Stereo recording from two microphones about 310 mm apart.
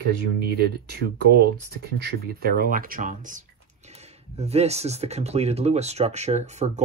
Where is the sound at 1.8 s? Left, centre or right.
Right.